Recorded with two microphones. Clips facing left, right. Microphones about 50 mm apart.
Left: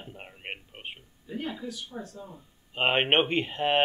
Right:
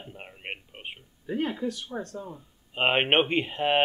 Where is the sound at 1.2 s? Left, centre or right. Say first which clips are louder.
Right 6 dB; right.